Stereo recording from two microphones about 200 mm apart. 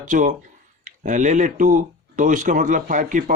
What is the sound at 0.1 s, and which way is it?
Speech, 40° right (ahead or behind).